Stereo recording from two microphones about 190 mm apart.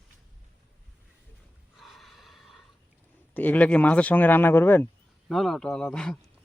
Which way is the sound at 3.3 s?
10° left (ahead or behind).